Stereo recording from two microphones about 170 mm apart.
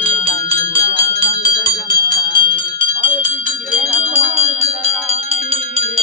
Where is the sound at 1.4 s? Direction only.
60° right (ahead or behind).